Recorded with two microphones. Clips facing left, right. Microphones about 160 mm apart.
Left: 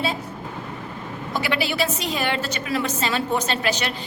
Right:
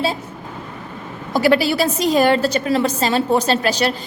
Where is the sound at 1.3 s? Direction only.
40° right (ahead or behind).